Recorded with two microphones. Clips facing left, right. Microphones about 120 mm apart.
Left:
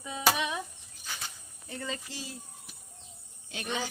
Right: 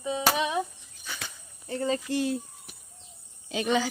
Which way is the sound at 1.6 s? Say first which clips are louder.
Right 10 dB; 35° right (ahead or behind).